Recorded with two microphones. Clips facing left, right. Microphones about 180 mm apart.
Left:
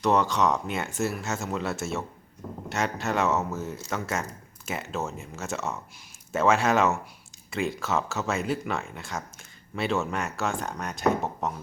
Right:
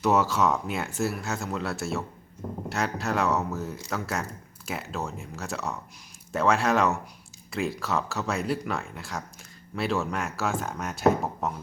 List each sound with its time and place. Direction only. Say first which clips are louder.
0.0 s speech: even; 5° right (ahead or behind)